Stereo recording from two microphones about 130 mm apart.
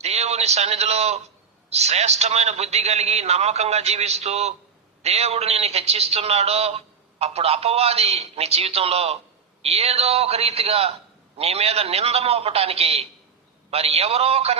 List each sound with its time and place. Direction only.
0.0 s a man's voice: 55° right (ahead or behind)